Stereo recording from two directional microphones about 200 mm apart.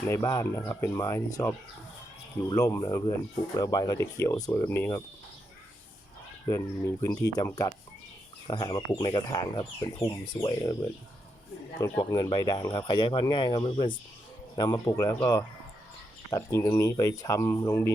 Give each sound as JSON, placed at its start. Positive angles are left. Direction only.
{"t": 0.1, "sound": "speech", "side_deg": 15}
{"t": 6.5, "sound": "speech", "side_deg": 15}
{"t": 11.8, "sound": "speech", "side_deg": 15}